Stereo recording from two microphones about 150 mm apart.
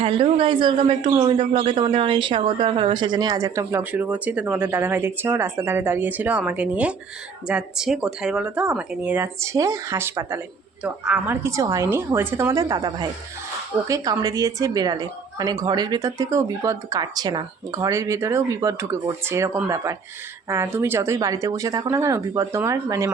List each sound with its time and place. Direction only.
0.0 s a man's voice: 40° right (ahead or behind); by 23.1 s 20° right (ahead or behind)